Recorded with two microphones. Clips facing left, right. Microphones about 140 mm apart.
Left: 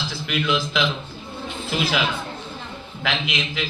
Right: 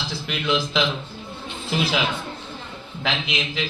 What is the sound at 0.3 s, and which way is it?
Speech, 30° right (ahead or behind).